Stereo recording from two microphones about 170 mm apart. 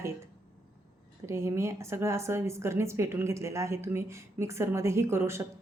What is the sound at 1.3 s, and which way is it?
A woman's voice, 15° right (ahead or behind).